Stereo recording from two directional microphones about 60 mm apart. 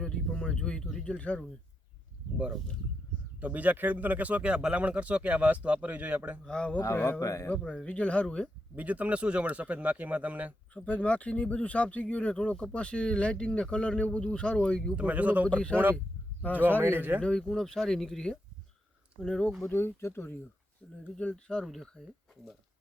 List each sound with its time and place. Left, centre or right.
0.0 s speech: centre
3.4 s speech: right
6.4 s speech: centre
7.2 s speech: left
7.7 s speech: left
8.7 s speech: right
10.8 s speech: left
14.9 s speech: right
15.4 s speech: centre
16.8 s a man's voice: right
17.2 s speech: centre
19.7 s speech: left
21.2 s speech: centre
21.7 s speech: centre